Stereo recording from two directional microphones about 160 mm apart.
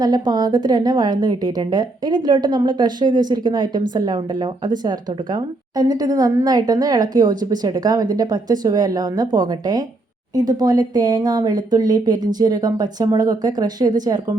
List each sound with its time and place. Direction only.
0.0 s a woman's voice: 25° right (ahead or behind)